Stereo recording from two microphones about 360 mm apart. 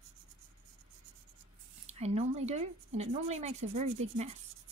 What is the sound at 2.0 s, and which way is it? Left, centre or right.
Speech, centre.